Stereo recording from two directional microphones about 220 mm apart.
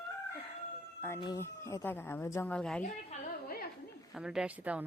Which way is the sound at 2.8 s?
40° left (ahead or behind).